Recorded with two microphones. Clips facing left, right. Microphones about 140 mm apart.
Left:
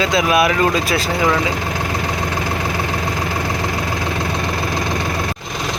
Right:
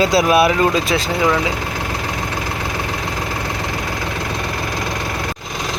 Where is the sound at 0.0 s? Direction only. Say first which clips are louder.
Right 2 dB; 35° right (ahead or behind).